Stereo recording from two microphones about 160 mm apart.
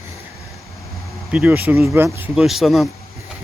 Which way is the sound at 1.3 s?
10° right (ahead or behind).